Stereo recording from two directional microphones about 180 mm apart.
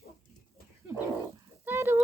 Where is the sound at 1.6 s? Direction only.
15° right (ahead or behind).